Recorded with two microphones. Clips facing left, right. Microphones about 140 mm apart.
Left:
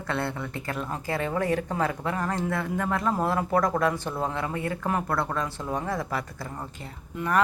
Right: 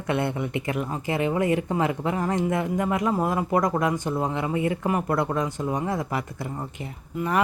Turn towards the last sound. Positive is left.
turn(degrees=-10)  # may be behind; listen again after turning